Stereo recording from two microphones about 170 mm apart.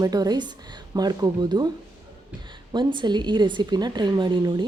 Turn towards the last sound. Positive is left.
turn(degrees=-25)  # may be behind; listen again after turning